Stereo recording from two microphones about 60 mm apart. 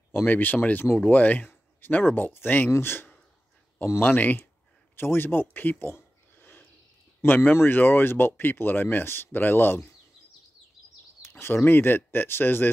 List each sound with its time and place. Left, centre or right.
0.1 s speech: left
4.9 s a sound: left
7.2 s speech: left
11.2 s speech: left